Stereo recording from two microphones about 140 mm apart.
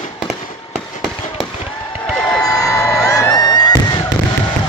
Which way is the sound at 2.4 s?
25° left (ahead or behind).